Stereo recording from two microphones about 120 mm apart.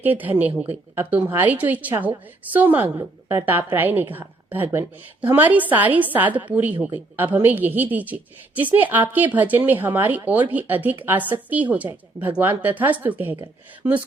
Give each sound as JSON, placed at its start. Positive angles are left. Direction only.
{"t": 0.0, "sound": "a woman's voice", "side_deg": -15}